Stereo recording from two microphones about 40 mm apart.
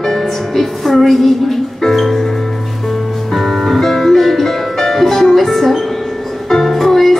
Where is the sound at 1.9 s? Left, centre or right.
Centre.